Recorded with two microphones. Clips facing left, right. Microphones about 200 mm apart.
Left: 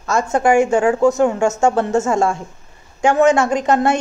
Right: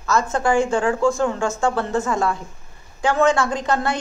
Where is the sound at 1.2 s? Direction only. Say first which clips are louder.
Left 6 dB; 20° left (ahead or behind).